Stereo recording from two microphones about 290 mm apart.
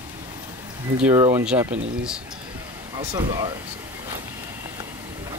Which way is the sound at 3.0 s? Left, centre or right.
Centre.